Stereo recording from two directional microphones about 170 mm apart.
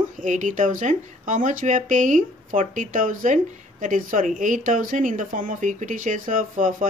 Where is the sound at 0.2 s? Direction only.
50° right (ahead or behind).